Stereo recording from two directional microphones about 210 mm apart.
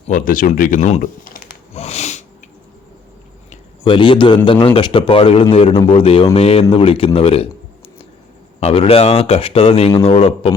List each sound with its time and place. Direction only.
0.1 s speech: 40° left (ahead or behind)
1.7 s sneeze: 30° left (ahead or behind)
3.5 s a sound: 25° left (ahead or behind)
4.6 s speech: 25° left (ahead or behind)
8.6 s speech: 25° left (ahead or behind)